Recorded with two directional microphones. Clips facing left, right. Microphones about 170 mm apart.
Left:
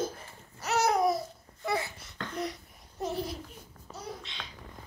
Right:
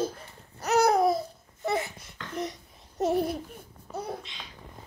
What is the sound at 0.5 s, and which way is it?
Babbling, 35° right (ahead or behind).